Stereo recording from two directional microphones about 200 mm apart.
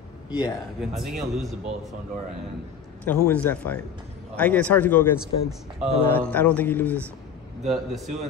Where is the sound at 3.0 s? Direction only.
10° left (ahead or behind).